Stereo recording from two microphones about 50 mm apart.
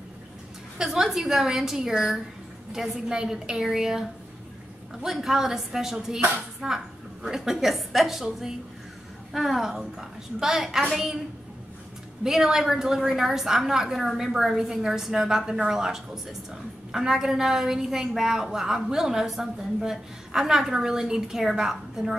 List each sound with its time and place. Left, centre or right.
0.7 s a woman's voice: centre
12.2 s a woman's voice: centre